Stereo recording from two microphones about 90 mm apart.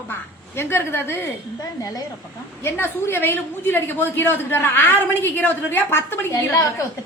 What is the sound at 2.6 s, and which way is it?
A woman's voice, 25° left (ahead or behind).